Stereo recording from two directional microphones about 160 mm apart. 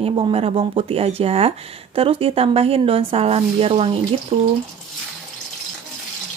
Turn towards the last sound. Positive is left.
turn(degrees=-35)  # may be behind; listen again after turning